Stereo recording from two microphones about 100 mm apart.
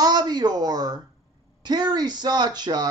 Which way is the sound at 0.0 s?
45° right (ahead or behind).